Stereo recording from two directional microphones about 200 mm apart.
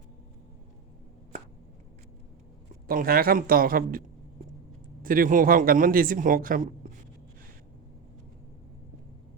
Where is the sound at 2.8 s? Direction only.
45° right (ahead or behind).